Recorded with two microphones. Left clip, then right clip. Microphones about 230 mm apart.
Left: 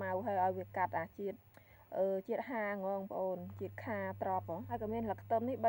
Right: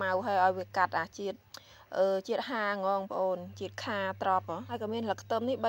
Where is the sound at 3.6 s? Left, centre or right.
Centre.